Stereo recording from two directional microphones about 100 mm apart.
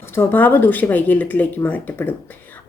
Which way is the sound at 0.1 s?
20° left (ahead or behind).